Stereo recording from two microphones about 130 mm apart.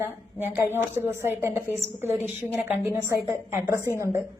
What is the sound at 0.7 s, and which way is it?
Speech, 20° left (ahead or behind).